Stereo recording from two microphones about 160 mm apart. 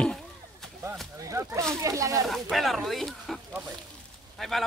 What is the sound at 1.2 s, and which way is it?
Speech, 20° right (ahead or behind).